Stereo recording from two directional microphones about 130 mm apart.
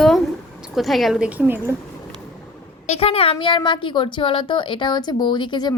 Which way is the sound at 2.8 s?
50° left (ahead or behind).